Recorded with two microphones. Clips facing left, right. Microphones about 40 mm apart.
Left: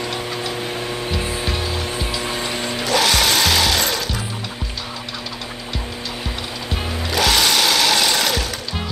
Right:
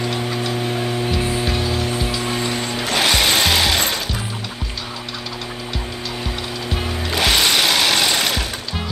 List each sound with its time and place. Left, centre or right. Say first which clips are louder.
0.7 s music: right 3 dB; centre
2.9 s music: even; centre
7.1 s sewing machine: even; centre